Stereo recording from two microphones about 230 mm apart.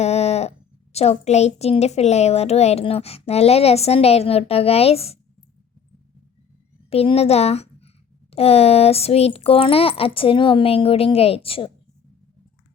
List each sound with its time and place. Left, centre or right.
0.0 s a sound: left
0.9 s a woman's voice: left
6.9 s a woman's voice: left